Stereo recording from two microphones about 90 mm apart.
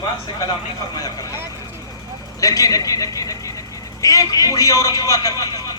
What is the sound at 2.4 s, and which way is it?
A man's voice, 40° left (ahead or behind).